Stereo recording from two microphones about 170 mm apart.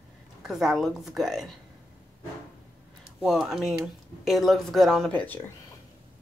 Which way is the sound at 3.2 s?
5° right (ahead or behind).